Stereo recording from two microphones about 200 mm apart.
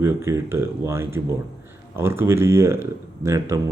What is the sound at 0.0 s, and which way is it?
Speech, 15° right (ahead or behind).